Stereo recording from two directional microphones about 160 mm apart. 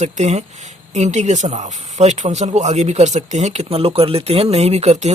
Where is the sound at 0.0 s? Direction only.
45° right (ahead or behind).